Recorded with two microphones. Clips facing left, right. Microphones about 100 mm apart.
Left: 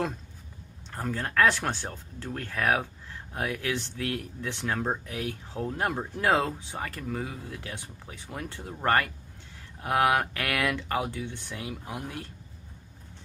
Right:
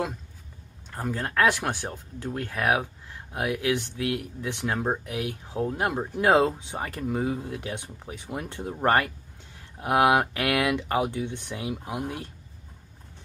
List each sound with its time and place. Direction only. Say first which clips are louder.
0.9 s speech: even; 15° right (ahead or behind)